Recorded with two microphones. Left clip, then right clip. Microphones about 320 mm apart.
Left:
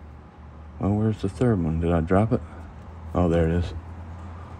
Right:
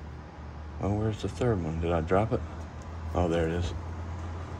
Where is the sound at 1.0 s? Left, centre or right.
Centre.